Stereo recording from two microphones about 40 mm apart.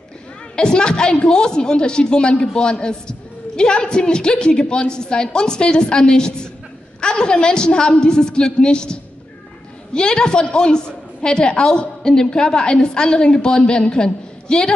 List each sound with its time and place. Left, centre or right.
0.6 s a woman's voice: left